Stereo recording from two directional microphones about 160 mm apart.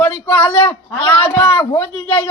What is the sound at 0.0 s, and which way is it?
A man's voice, 10° left (ahead or behind).